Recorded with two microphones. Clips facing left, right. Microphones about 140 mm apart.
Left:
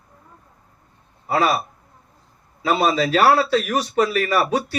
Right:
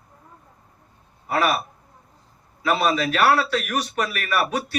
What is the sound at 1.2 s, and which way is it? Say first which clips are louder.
Speech: left 2 dB; 30° left (ahead or behind).